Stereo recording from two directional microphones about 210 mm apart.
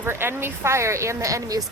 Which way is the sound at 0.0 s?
10° right (ahead or behind).